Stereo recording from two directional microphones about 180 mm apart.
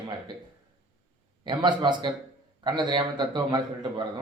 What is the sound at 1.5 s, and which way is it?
A man's voice, 25° right (ahead or behind).